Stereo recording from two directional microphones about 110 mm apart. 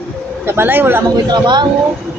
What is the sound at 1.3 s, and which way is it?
Speech, 40° right (ahead or behind).